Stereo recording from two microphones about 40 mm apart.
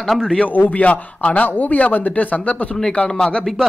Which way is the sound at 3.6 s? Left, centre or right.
Centre.